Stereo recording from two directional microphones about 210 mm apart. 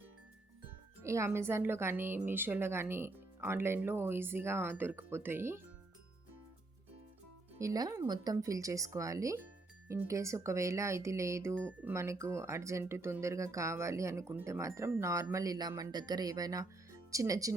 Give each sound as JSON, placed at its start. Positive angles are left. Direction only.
{"t": 1.0, "sound": "speech", "side_deg": -15}
{"t": 7.6, "sound": "speech", "side_deg": -15}